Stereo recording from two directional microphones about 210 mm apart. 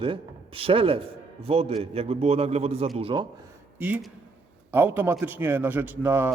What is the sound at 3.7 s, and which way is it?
A man's voice, 10° right (ahead or behind).